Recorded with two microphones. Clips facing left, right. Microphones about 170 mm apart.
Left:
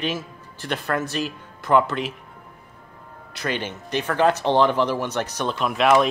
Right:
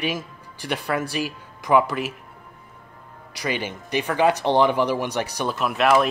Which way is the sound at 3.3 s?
10° right (ahead or behind).